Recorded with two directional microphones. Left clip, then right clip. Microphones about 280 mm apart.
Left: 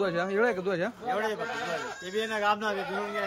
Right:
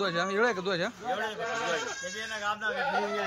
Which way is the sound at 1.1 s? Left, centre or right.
Left.